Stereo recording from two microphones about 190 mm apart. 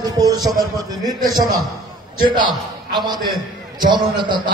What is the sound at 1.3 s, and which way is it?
A man's voice, 20° right (ahead or behind).